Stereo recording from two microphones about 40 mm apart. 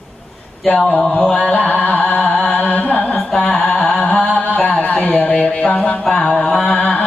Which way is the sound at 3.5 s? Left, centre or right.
Left.